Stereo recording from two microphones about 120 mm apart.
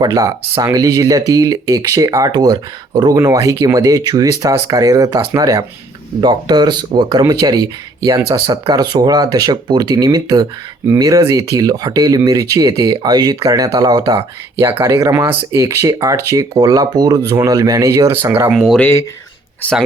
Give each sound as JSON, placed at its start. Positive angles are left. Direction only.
{"t": 0.0, "sound": "speech", "side_deg": -30}
{"t": 18.5, "sound": "speech", "side_deg": -5}
{"t": 18.8, "sound": "speech", "side_deg": 20}